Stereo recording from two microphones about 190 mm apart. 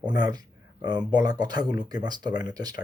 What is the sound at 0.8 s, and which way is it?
Speech, 20° right (ahead or behind).